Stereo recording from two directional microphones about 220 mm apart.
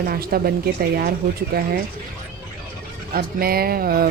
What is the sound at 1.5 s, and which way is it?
Speech, 45° right (ahead or behind).